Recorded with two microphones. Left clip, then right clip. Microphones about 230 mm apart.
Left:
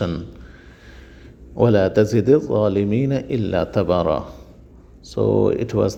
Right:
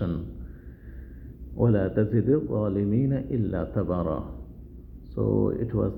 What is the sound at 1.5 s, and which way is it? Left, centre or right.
Speech, left.